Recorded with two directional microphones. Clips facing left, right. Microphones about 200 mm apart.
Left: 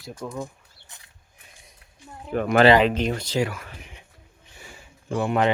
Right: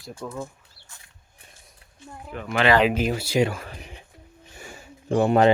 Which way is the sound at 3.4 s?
30° right (ahead or behind).